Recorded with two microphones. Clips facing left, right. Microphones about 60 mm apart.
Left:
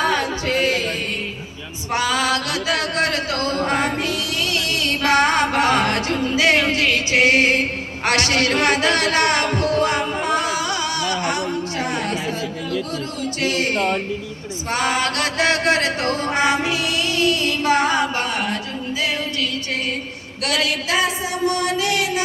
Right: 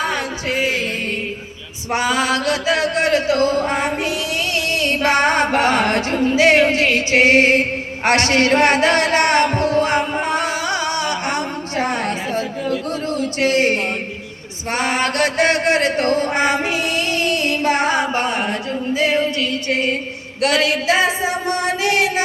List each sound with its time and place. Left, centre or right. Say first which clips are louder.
0.0 s music: left 2 dB; centre
0.7 s music: right 1 dB; right
3.7 s a sound: right 1 dB; right
14.7 s chant: right 1 dB; right
18.9 s music: right 6 dB; right
20.4 s chant: right 5 dB; right